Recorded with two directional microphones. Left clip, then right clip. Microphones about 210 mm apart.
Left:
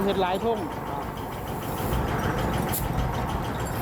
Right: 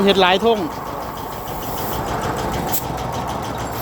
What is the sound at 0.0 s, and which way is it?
Speech, 40° right (ahead or behind).